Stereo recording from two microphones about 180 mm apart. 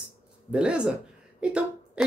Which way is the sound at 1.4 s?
5° right (ahead or behind).